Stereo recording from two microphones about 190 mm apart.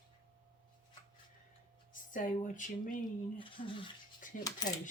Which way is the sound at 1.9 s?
45° left (ahead or behind).